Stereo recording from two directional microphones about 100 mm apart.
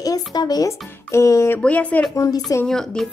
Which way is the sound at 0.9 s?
25° left (ahead or behind).